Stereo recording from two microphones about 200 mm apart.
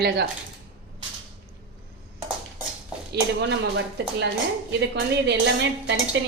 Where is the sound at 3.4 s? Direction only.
60° right (ahead or behind).